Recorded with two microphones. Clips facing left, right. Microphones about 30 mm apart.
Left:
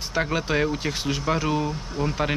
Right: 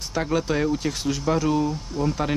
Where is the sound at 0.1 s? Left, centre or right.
Centre.